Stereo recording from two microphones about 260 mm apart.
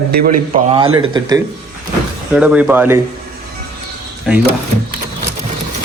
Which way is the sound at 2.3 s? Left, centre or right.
Centre.